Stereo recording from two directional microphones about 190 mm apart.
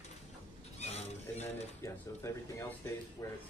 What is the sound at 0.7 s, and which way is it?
Speech, 35° left (ahead or behind).